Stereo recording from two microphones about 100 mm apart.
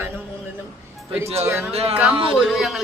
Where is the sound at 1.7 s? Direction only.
85° right.